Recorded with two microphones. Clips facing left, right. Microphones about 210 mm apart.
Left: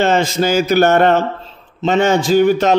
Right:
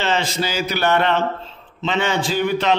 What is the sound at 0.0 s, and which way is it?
A man's voice, 50° left (ahead or behind).